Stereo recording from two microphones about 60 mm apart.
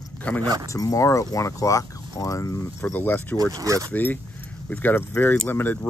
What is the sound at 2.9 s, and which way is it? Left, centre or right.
Speech, left.